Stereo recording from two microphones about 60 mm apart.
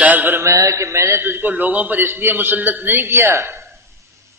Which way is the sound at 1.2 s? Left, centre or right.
Right.